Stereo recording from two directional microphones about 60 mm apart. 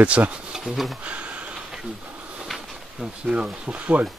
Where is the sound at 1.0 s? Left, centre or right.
Right.